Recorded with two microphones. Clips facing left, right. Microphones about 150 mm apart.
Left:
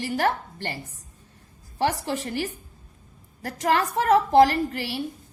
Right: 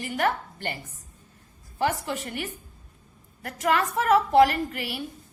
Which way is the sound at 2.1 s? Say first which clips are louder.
Left 4 dB; 35° left (ahead or behind).